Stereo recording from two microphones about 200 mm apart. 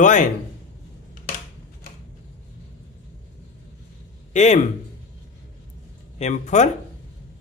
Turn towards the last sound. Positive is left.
turn(degrees=35)  # may be behind; listen again after turning